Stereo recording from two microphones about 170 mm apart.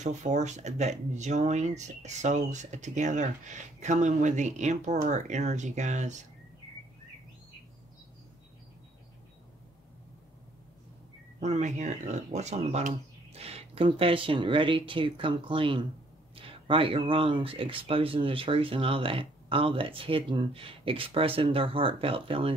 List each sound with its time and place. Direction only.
0.0 s speech: 45° right (ahead or behind)
11.3 s speech: 45° right (ahead or behind)